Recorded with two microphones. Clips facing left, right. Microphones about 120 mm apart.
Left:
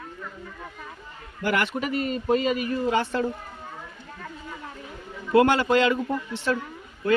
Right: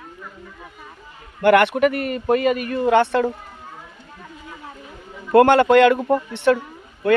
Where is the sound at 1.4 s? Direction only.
65° right (ahead or behind).